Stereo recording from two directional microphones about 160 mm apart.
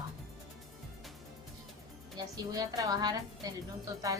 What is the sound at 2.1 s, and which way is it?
A woman's voice, 25° right (ahead or behind).